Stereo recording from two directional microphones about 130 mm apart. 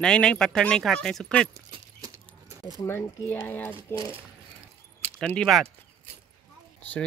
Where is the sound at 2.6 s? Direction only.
25° left (ahead or behind).